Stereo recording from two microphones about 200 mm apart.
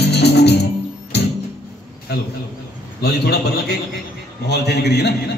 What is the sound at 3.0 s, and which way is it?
Speech, 55° left (ahead or behind).